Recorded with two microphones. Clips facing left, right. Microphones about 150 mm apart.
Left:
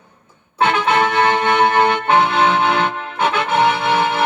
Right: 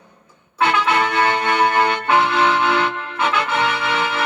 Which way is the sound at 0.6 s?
30° left (ahead or behind).